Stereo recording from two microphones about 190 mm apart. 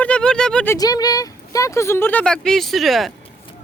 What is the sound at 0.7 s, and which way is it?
Speech, 20° left (ahead or behind).